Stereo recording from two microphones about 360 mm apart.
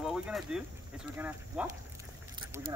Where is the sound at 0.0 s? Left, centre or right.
Centre.